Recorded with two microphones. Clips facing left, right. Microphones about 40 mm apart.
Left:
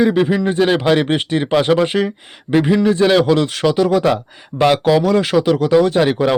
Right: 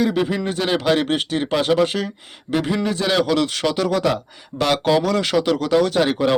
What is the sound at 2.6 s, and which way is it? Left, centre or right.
Speech, centre.